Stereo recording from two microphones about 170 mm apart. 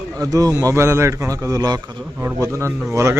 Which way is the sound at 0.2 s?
20° right (ahead or behind).